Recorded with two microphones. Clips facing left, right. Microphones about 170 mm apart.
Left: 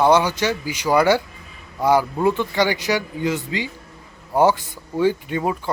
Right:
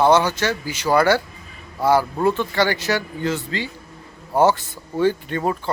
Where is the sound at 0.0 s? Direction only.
15° left (ahead or behind).